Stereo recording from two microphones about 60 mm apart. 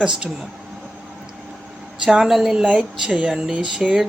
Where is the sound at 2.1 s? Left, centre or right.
Centre.